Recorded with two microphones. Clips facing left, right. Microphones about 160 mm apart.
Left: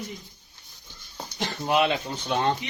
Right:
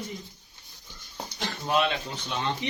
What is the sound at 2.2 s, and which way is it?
Speech, 55° left (ahead or behind).